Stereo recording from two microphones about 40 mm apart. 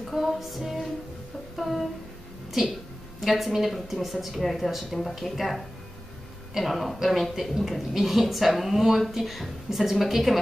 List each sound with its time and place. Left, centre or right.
0.1 s a woman's voice: centre
3.2 s a woman's voice: centre